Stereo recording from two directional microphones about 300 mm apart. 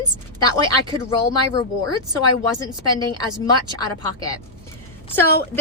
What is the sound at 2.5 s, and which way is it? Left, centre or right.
A woman's voice, centre.